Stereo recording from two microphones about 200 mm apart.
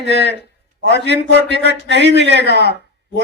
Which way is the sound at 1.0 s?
60° right (ahead or behind).